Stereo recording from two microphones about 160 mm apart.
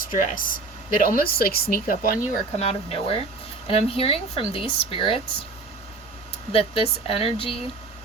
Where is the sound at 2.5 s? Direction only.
40° left (ahead or behind).